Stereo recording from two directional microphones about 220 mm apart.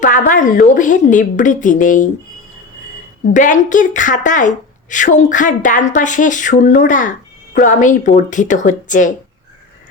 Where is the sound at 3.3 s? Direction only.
35° left (ahead or behind).